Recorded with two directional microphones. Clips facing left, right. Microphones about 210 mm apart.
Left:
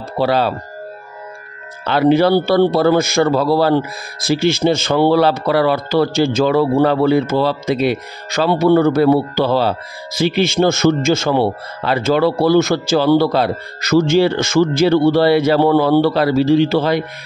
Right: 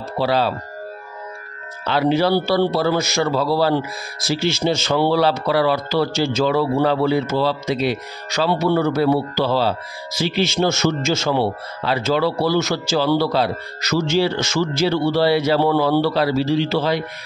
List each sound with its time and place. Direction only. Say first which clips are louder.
0.2 s a man's voice: left 3 dB; 55° left (ahead or behind)
1.9 s a man's voice: left 5 dB; 55° left (ahead or behind)